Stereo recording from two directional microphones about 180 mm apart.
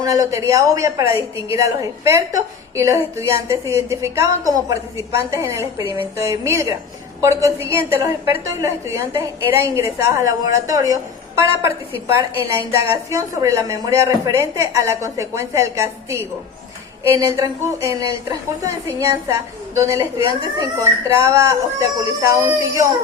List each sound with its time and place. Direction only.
0.0 s a woman's voice: 20° right (ahead or behind)
12.5 s a woman's voice: 15° right (ahead or behind)